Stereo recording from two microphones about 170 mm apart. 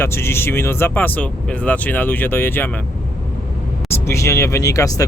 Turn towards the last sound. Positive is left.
turn(degrees=20)  # may be behind; listen again after turning